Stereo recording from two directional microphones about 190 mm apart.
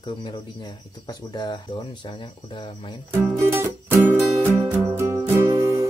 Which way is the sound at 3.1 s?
10° right (ahead or behind).